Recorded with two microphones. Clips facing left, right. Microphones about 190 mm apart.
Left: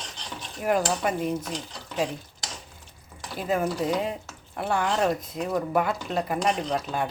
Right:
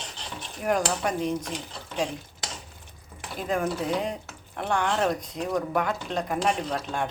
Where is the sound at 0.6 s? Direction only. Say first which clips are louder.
Left 1 dB; 5° left (ahead or behind).